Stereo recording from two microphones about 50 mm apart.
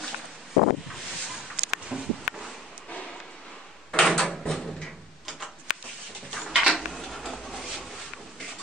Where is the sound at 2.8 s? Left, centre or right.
Centre.